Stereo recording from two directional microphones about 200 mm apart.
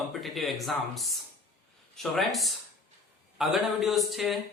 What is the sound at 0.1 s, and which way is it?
Speech, centre (ahead or behind).